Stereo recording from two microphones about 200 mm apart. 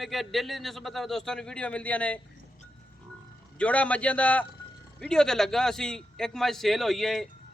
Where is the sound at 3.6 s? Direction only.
5° left (ahead or behind).